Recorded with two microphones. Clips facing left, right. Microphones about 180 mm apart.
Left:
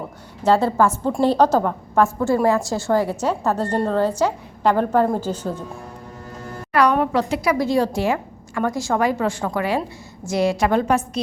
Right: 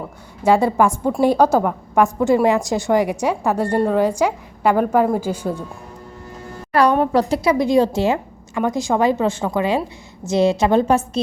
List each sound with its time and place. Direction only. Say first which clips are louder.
0.4 s a woman's voice: right 2 dB; 15° right (ahead or behind)
6.7 s a woman's voice: right 2 dB; 30° right (ahead or behind)
7.4 s a woman's voice: right 3 dB; 20° right (ahead or behind)